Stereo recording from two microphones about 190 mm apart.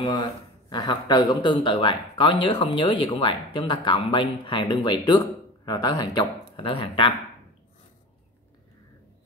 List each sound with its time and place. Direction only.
0.0 s a man's voice: 25° left (ahead or behind)